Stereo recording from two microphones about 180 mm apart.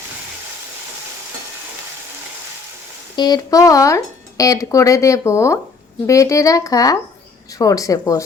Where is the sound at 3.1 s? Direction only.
20° left (ahead or behind).